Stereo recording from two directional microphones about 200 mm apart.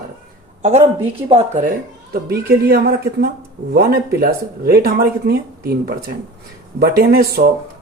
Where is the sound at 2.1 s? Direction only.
50° right (ahead or behind).